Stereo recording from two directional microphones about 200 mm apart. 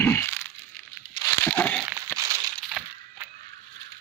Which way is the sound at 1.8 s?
5° right (ahead or behind).